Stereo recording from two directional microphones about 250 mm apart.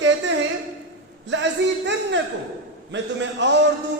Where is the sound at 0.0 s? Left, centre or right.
Right.